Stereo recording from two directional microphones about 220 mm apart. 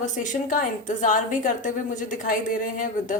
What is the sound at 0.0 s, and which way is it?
A woman's voice, 35° left (ahead or behind).